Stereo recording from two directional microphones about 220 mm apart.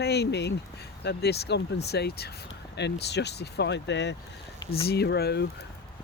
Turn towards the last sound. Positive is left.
turn(degrees=45)  # may be behind; listen again after turning